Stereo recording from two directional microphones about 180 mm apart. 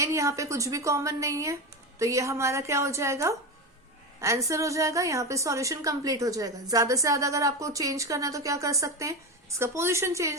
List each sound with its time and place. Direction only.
0.0 s a woman's voice: 15° right (ahead or behind)